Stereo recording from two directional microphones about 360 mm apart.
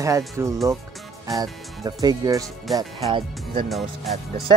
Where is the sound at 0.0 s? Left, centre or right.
Centre.